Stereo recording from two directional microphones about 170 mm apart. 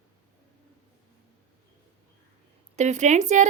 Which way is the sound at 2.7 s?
45° right (ahead or behind).